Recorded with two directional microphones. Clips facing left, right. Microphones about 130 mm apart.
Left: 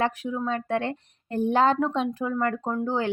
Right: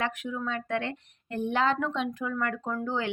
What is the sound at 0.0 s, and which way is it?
Speech, 35° left (ahead or behind).